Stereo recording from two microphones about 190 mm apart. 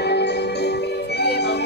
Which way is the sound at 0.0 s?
60° left (ahead or behind).